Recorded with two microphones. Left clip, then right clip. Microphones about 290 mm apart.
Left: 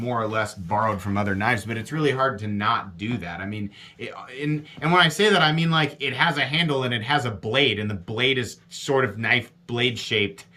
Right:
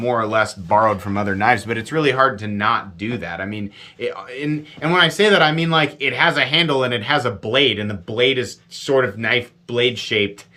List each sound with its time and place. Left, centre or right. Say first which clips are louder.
0.0 s speech: right 7 dB; centre